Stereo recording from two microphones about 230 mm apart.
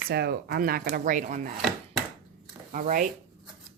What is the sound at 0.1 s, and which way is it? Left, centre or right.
Speech, right.